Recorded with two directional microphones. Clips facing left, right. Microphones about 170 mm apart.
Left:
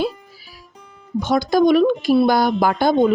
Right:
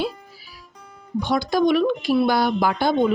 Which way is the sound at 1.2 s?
45° left (ahead or behind).